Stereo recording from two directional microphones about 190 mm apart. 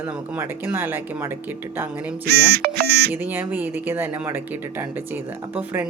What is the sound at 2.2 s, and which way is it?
Speech, 55° right (ahead or behind).